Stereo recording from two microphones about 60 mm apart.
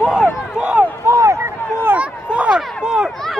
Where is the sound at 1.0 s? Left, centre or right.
Right.